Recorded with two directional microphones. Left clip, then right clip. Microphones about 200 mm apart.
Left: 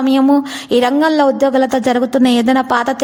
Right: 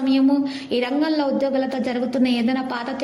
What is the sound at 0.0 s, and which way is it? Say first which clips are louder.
A woman's voice: left 7 dB; 45° left (ahead or behind).